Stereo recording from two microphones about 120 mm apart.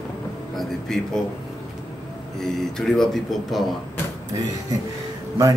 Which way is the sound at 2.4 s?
5° left (ahead or behind).